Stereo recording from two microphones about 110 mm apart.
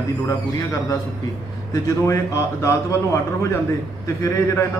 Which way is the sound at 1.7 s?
30° left (ahead or behind).